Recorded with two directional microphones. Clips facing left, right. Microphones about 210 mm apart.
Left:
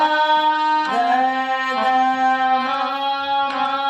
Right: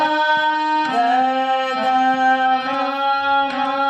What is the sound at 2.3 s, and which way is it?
Music, 20° right (ahead or behind).